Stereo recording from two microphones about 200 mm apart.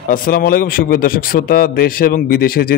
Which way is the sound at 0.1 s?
45° left (ahead or behind).